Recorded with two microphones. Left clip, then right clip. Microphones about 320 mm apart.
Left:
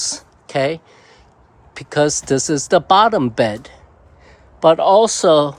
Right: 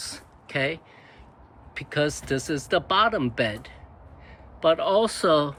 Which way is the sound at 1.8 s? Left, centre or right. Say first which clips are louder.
Left 9 dB; left.